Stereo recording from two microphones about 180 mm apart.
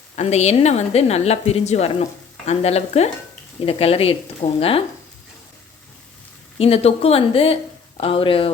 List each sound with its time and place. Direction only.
0.2 s speech: 40° left (ahead or behind)
6.6 s speech: 35° left (ahead or behind)